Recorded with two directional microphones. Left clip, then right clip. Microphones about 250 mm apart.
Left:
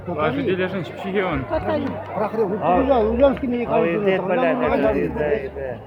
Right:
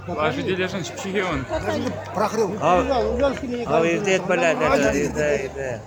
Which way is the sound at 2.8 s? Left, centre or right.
Left.